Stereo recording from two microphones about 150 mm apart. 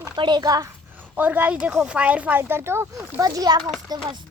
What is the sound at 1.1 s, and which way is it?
A child's voice, 10° right (ahead or behind).